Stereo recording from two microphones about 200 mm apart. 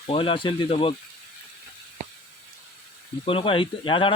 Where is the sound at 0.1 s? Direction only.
25° left (ahead or behind).